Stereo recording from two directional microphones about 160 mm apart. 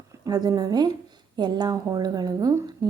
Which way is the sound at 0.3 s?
25° right (ahead or behind).